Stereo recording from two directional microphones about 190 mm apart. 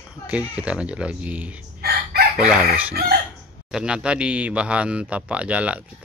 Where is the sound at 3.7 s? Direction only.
5° right (ahead or behind).